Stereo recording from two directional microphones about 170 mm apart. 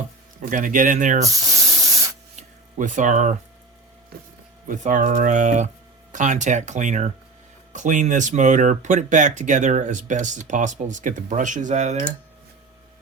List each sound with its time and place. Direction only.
0.4 s speech: 50° right (ahead or behind)
1.2 s spray: 20° right (ahead or behind)
2.3 s a sound: 45° right (ahead or behind)
4.7 s speech: 50° right (ahead or behind)